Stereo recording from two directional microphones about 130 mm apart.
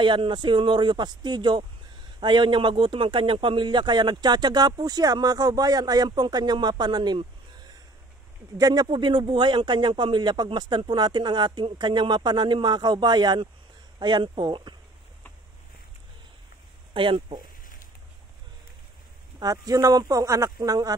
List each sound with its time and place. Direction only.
0.0 s speech: 40° right (ahead or behind)
16.9 s speech: 40° right (ahead or behind)
19.4 s speech: 30° right (ahead or behind)